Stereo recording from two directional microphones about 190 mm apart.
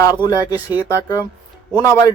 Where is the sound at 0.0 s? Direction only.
20° left (ahead or behind).